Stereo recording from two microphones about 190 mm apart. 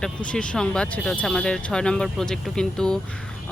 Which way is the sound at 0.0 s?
5° left (ahead or behind).